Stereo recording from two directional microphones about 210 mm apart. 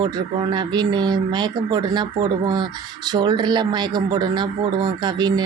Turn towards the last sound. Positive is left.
turn(degrees=-20)  # may be behind; listen again after turning